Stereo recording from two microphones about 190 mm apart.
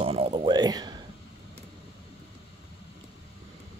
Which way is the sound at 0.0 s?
30° right (ahead or behind).